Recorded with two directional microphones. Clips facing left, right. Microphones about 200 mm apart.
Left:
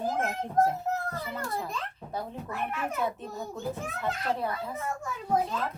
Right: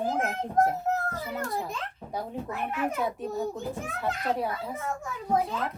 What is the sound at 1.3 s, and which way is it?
A child's voice, 15° right (ahead or behind).